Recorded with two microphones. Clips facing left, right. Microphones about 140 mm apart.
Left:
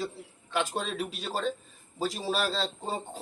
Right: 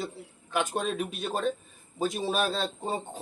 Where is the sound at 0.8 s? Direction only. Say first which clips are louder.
Right 3 dB; 20° right (ahead or behind).